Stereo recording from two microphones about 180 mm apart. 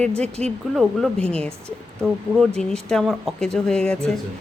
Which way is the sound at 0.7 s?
5° left (ahead or behind).